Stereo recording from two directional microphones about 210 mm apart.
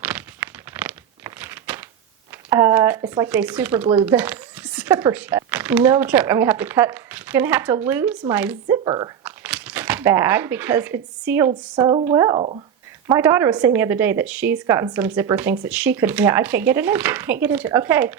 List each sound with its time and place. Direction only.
0.0 s a sound: 5° right (ahead or behind)
2.5 s speech: 15° right (ahead or behind)
4.0 s a sound: 5° right (ahead or behind)
5.5 s a woman's voice: 5° right (ahead or behind)
8.6 s speech: 20° right (ahead or behind)
9.2 s speech: 5° right (ahead or behind); by 12.6 s 25° right (ahead or behind)
13.1 s a woman's voice: 15° right (ahead or behind)